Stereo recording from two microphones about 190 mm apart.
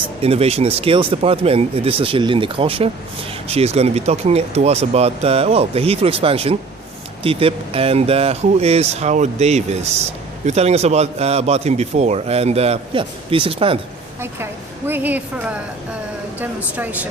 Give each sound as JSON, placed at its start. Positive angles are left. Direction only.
{"t": 0.2, "sound": "speech", "side_deg": -30}
{"t": 14.8, "sound": "a woman's voice", "side_deg": -10}
{"t": 16.7, "sound": "a woman's voice", "side_deg": -10}